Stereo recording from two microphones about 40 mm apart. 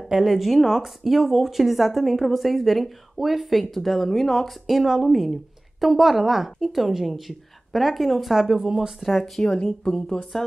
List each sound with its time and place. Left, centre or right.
0.1 s speech: centre
9.0 s speech: centre
9.4 s speech: centre